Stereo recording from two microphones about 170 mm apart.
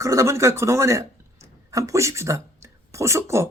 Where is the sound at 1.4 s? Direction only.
20° right (ahead or behind).